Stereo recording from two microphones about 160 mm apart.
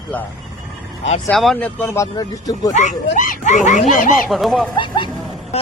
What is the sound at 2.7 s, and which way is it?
Speech, 50° left (ahead or behind).